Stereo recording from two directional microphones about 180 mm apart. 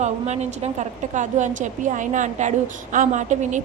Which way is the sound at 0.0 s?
40° right (ahead or behind).